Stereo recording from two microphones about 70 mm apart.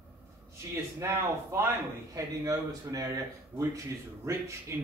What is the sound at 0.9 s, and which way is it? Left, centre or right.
Speech, right.